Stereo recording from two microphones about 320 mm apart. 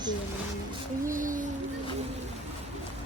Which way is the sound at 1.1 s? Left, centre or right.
Right.